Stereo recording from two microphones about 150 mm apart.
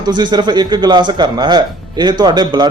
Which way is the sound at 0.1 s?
30° right (ahead or behind).